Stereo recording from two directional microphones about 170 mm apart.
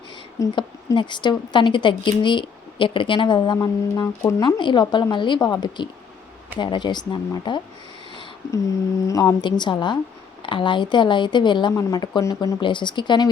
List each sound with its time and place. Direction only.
0.5 s speech: 30° left (ahead or behind)
4.4 s speech: 25° left (ahead or behind)
9.0 s speech: 20° left (ahead or behind)